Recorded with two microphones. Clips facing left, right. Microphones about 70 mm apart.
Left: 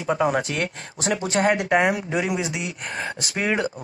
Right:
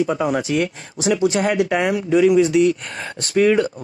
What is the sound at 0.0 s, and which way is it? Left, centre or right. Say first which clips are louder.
Speech: right 2 dB; centre.